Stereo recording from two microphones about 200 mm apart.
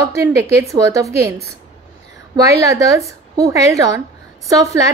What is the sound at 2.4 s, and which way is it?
A woman's voice, 15° right (ahead or behind).